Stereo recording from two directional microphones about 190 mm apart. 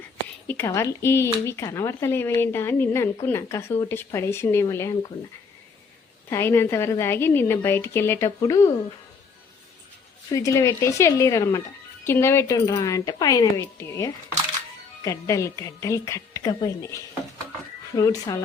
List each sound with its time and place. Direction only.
0.4 s speech: 10° left (ahead or behind)
6.3 s speech: 15° left (ahead or behind)
10.3 s speech: 15° left (ahead or behind)